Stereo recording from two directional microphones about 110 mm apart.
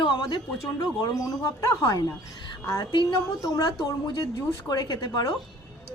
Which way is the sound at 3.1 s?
35° left (ahead or behind).